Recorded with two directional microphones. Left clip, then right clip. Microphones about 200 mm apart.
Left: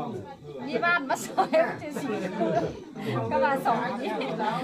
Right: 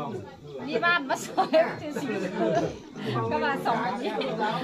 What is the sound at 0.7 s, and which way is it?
Speech, 15° left (ahead or behind).